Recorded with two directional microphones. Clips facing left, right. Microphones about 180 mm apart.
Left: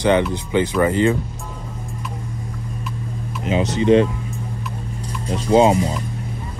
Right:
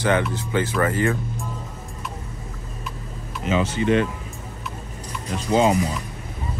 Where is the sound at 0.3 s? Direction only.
20° left (ahead or behind).